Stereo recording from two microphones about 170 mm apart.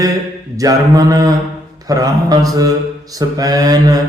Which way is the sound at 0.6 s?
20° right (ahead or behind).